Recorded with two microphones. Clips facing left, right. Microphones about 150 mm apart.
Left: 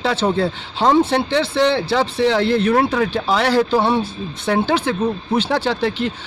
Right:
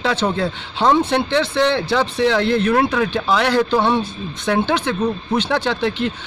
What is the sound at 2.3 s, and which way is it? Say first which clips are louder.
Speech: left 1 dB; 35° left (ahead or behind).